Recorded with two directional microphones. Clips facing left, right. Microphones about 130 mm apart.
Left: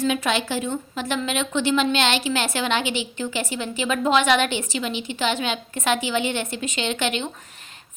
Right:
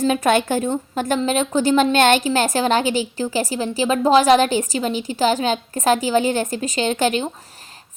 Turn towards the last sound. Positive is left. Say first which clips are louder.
# right 6 dB
turn(degrees=-40)  # may be behind; listen again after turning